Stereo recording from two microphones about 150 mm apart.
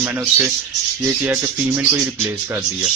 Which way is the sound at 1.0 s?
15° right (ahead or behind).